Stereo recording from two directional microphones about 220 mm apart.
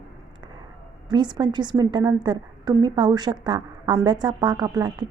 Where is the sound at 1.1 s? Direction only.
20° right (ahead or behind).